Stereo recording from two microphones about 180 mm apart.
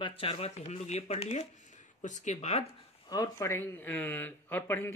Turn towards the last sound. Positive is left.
turn(degrees=10)  # may be behind; listen again after turning